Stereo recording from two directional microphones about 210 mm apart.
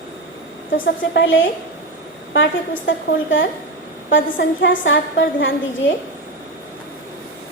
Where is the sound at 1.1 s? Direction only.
60° left (ahead or behind).